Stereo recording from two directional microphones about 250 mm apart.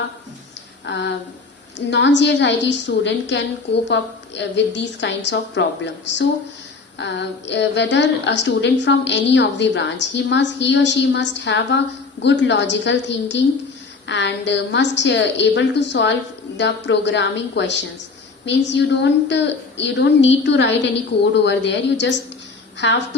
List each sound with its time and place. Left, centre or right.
0.9 s a woman's voice: left